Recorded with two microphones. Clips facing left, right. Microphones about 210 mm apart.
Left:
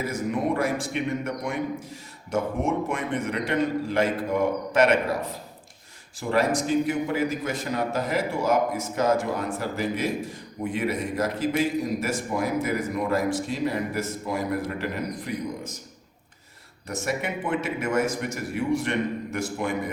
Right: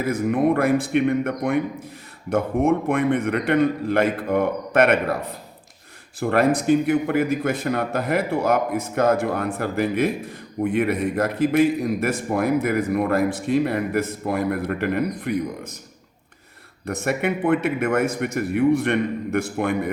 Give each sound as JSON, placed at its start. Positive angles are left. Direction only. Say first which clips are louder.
{"t": 0.0, "sound": "a man's voice", "louder": "right 6 dB", "side_deg": -55}
{"t": 6.1, "sound": "a man's voice", "louder": "right 4 dB", "side_deg": -60}
{"t": 16.8, "sound": "a man's voice", "louder": "right 5 dB", "side_deg": -60}